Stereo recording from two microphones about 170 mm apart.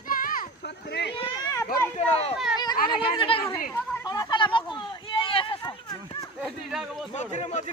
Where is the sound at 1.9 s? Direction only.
40° left (ahead or behind).